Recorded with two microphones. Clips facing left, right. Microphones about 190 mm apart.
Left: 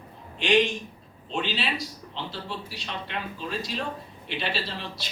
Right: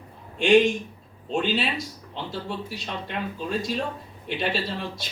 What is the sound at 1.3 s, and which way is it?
A man's voice, 50° right (ahead or behind).